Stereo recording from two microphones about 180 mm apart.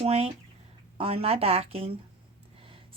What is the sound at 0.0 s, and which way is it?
Speech, 35° right (ahead or behind).